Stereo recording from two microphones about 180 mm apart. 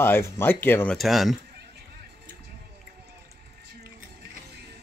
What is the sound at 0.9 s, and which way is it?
Speech, centre (ahead or behind).